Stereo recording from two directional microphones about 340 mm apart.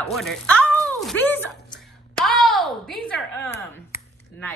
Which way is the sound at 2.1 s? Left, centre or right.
Centre.